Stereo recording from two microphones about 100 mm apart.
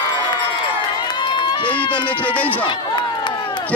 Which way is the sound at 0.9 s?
45° left (ahead or behind).